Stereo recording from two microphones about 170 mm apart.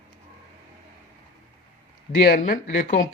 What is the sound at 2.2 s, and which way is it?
Speech, 50° left (ahead or behind).